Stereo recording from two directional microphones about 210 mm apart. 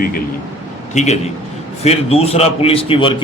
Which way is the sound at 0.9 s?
30° left (ahead or behind).